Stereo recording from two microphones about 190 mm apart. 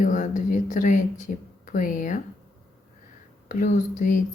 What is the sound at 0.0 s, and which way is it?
Speech, 40° left (ahead or behind).